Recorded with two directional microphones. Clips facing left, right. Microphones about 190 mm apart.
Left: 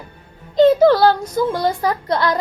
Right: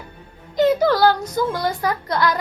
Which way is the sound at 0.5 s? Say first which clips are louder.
Left 5 dB; 25° left (ahead or behind).